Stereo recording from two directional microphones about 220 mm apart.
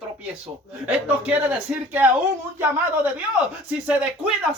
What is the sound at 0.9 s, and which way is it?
Speech, 5° right (ahead or behind).